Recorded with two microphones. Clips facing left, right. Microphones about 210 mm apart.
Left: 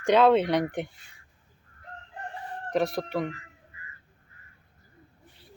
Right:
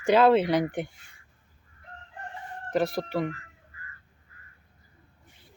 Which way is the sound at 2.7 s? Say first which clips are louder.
Even; centre (ahead or behind).